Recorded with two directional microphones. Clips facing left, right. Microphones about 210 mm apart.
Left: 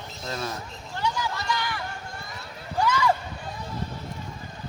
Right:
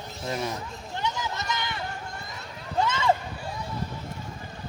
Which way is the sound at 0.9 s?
20° right (ahead or behind).